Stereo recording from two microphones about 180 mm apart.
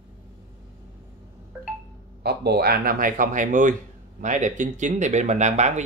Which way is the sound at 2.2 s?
65° right (ahead or behind).